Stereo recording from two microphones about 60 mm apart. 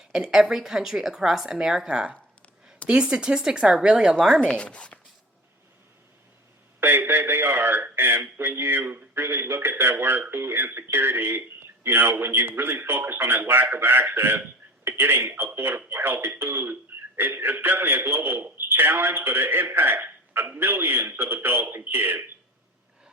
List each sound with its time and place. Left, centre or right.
0.0 s a woman's voice: centre
4.4 s speech: centre
6.7 s a man's voice: right